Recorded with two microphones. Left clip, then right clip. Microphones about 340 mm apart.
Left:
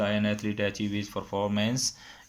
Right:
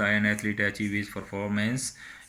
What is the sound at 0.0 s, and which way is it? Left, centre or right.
Speech, centre.